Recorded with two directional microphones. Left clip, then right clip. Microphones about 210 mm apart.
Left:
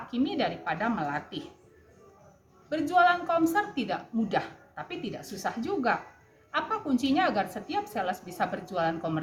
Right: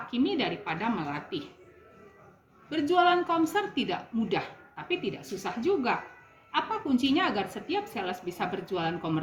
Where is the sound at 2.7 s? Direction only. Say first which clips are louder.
Left 1 dB; 15° left (ahead or behind).